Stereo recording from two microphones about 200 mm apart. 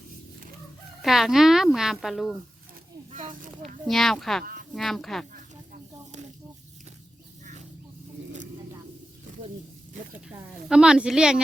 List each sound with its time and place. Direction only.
1.0 s speech: centre (ahead or behind)
3.1 s speech: 40° right (ahead or behind)
3.8 s speech: centre (ahead or behind)
5.3 s snake: 40° right (ahead or behind)
10.2 s speech: 5° right (ahead or behind)